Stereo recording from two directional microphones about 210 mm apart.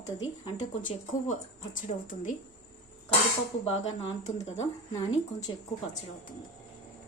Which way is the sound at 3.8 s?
30° left (ahead or behind).